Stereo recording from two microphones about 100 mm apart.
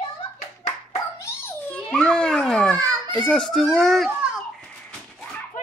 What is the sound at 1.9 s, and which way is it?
Children playing, 10° left (ahead or behind).